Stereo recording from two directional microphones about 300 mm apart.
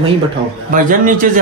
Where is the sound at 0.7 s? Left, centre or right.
Right.